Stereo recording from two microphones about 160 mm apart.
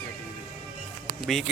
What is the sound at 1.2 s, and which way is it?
Speech, centre (ahead or behind).